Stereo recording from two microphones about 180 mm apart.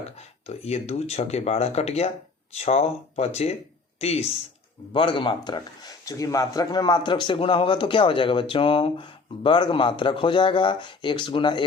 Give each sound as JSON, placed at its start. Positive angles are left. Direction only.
{"t": 0.2, "sound": "speech", "side_deg": 35}